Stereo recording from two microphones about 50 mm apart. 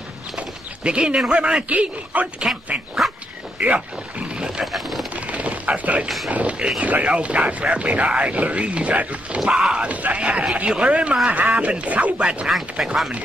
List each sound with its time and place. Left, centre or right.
0.4 s bird: centre
1.3 s speech: right
2.4 s chopping: centre
3.0 s dog: centre
3.5 s speech: right
4.3 s a sound: centre
4.7 s a sound: centre
5.1 s a sound: right
6.0 s a sound: centre
6.8 s speech: right
9.5 s chopping: centre
9.8 s speech: right
12.4 s chopping: centre